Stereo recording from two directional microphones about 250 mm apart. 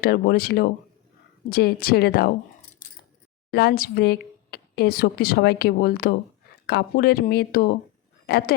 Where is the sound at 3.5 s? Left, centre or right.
Left.